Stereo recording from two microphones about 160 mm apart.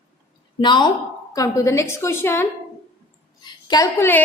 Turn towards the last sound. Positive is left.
turn(degrees=15)  # may be behind; listen again after turning